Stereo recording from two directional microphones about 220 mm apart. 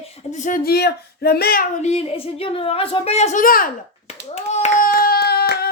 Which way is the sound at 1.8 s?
30° left (ahead or behind).